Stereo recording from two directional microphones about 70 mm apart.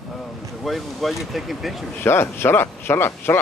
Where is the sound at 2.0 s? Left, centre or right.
Left.